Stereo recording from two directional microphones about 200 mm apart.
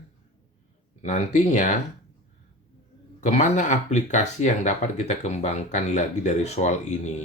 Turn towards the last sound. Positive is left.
turn(degrees=35)  # may be behind; listen again after turning